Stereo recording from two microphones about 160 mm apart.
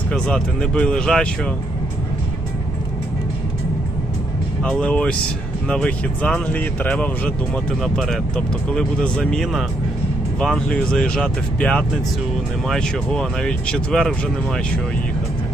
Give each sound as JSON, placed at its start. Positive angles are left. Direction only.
{"t": 0.1, "sound": "speech", "side_deg": 5}
{"t": 4.6, "sound": "speech", "side_deg": 5}